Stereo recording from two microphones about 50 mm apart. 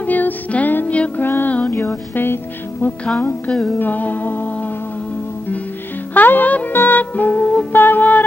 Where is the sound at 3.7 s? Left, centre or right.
Left.